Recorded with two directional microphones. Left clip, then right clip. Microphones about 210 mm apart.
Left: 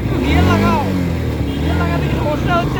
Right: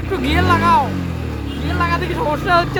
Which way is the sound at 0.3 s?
15° right (ahead or behind).